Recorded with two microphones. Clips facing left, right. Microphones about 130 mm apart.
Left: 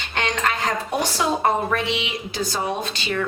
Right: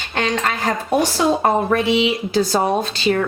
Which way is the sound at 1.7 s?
30° right (ahead or behind).